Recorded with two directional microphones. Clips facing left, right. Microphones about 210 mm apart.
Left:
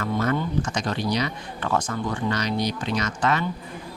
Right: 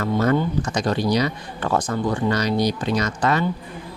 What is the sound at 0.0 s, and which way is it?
Speech, 35° right (ahead or behind).